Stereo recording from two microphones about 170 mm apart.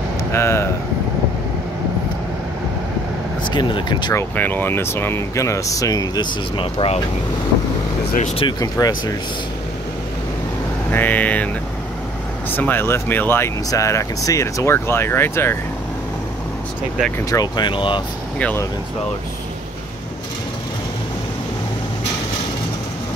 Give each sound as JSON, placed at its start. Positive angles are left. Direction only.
{"t": 0.3, "sound": "speech", "side_deg": 15}
{"t": 3.4, "sound": "speech", "side_deg": 25}
{"t": 4.2, "sound": "speech", "side_deg": 10}
{"t": 8.4, "sound": "speech", "side_deg": 25}
{"t": 10.9, "sound": "speech", "side_deg": 10}
{"t": 17.3, "sound": "speech", "side_deg": 25}
{"t": 18.4, "sound": "speech", "side_deg": 10}